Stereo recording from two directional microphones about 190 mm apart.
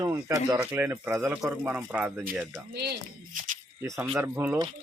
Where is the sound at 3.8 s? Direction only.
15° right (ahead or behind).